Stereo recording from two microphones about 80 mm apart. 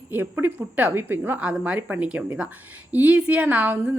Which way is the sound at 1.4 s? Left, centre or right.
Centre.